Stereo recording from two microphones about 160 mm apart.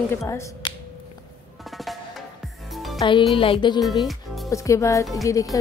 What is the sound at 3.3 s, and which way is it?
Music, 35° left (ahead or behind).